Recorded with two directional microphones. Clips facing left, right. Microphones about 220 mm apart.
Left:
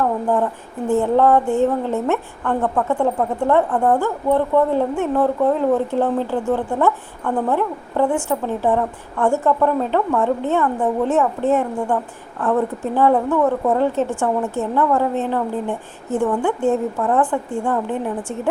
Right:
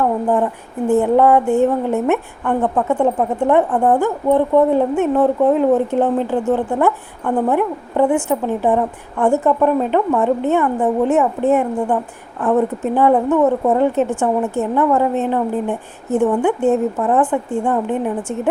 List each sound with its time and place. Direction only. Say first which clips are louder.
0.9 s a woman's voice: right 3 dB; 15° right (ahead or behind)